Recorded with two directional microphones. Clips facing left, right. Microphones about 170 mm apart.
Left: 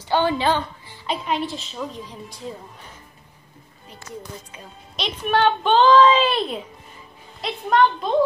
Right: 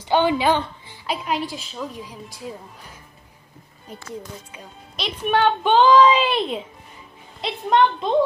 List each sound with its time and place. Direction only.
0.1 s speech: 15° right (ahead or behind)
1.0 s a woman's voice: 5° right (ahead or behind)
4.5 s a woman's voice: 5° right (ahead or behind); by 8.1 s 25° right (ahead or behind)